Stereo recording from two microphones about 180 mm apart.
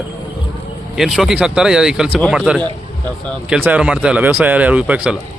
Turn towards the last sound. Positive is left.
turn(degrees=-5)  # may be behind; listen again after turning